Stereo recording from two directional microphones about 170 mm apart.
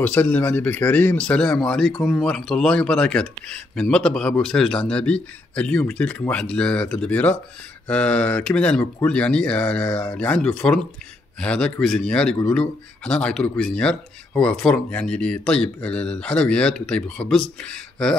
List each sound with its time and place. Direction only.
0.0 s speech: 10° left (ahead or behind)